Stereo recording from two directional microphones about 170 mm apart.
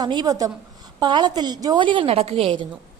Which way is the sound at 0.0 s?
25° right (ahead or behind).